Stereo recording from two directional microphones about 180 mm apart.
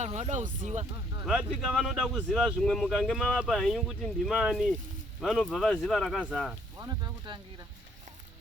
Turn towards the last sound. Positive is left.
turn(degrees=-20)  # may be behind; listen again after turning